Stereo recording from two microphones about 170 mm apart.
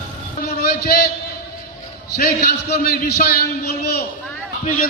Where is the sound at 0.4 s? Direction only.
70° left (ahead or behind).